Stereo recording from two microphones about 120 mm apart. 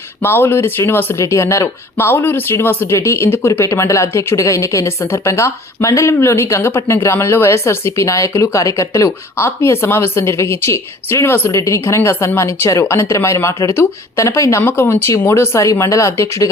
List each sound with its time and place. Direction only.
0.2 s speech: 20° left (ahead or behind)